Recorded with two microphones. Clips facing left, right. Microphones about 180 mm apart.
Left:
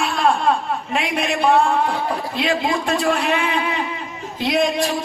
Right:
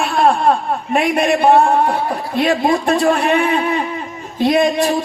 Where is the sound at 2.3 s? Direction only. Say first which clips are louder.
Right 7 dB; 55° right (ahead or behind).